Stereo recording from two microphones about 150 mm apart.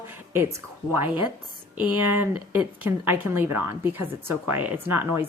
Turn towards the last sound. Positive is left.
turn(degrees=-10)  # may be behind; listen again after turning